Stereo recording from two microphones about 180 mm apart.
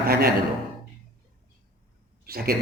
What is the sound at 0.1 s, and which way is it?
Speech, 60° right (ahead or behind).